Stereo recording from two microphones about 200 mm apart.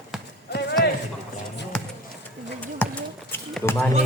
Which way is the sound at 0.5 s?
55° left (ahead or behind).